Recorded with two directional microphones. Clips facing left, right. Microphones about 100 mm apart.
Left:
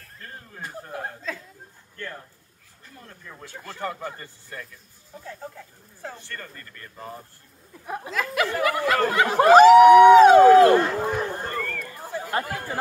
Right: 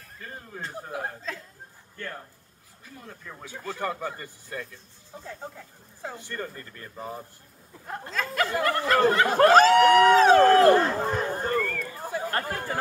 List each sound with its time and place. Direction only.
0.7 s speech: 15° right (ahead or behind)
1.0 s speech: centre (ahead or behind)
2.8 s speech: 10° right (ahead or behind)
6.0 s speech: 15° right (ahead or behind)
7.8 s speech: 10° left (ahead or behind)
11.3 s a sound: 5° right (ahead or behind)
12.3 s speech: 10° left (ahead or behind)